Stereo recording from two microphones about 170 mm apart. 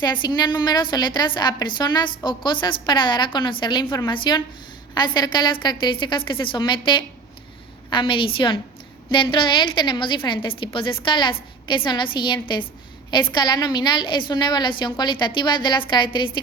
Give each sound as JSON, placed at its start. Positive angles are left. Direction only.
{"t": 0.0, "sound": "a woman's voice", "side_deg": 25}